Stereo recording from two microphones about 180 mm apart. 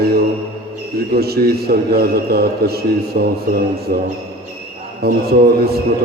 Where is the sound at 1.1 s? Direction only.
60° right (ahead or behind).